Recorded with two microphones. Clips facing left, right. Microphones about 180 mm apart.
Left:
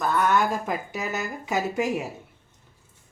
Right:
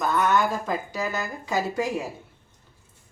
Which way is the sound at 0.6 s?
20° left (ahead or behind).